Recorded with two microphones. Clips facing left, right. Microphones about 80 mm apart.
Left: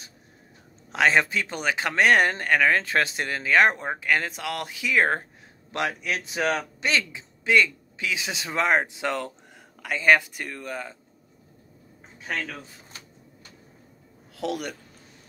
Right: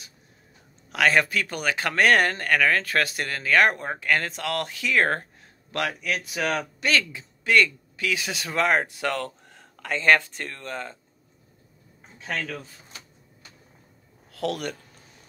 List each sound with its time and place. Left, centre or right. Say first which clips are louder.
0.9 s speech: even; left
12.2 s a man's voice: right 1 dB; centre
14.3 s speech: right 1 dB; centre